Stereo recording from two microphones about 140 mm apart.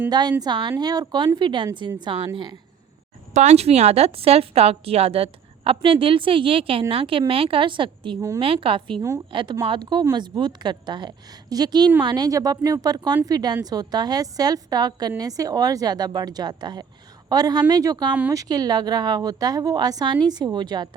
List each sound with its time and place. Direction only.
0.1 s a woman's voice: 30° right (ahead or behind)
3.3 s a woman's voice: 50° right (ahead or behind)
9.0 s a woman's voice: 20° right (ahead or behind)
9.3 s a woman's voice: 35° right (ahead or behind)